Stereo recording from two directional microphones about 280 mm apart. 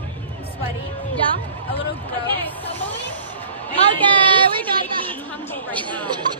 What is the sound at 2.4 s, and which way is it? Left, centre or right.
Hubbub, centre.